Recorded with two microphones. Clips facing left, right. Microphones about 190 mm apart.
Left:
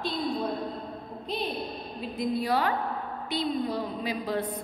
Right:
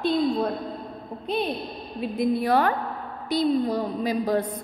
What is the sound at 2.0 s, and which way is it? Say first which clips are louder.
A woman's voice: right 6 dB; 55° right (ahead or behind).